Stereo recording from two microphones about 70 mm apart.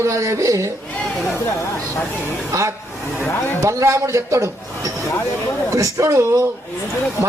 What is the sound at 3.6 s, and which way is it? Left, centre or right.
A man's voice, right.